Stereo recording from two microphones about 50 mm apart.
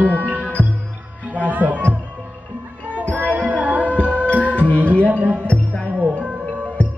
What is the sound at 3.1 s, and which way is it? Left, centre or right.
Music, right.